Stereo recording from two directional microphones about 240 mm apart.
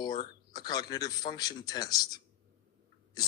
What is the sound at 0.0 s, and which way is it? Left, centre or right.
Speech, centre.